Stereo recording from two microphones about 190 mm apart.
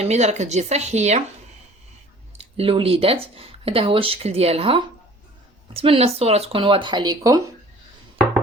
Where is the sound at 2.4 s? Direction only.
30° right (ahead or behind).